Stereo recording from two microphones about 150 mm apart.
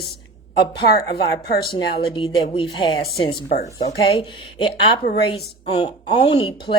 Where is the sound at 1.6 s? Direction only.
35° left (ahead or behind).